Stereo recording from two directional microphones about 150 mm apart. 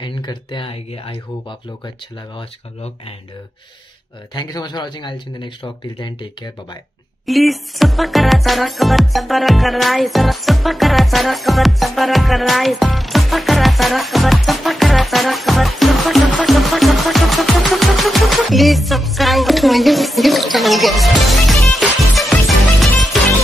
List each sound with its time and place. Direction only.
0.0 s speech: 30° left (ahead or behind)
4.3 s speech: 30° left (ahead or behind)
7.2 s speech: centre (ahead or behind)